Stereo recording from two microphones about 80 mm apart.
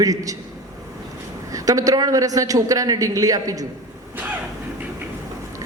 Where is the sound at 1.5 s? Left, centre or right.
Right.